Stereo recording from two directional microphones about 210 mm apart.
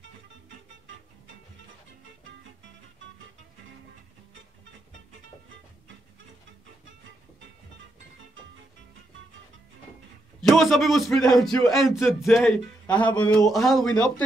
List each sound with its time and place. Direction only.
10.4 s speech: centre (ahead or behind)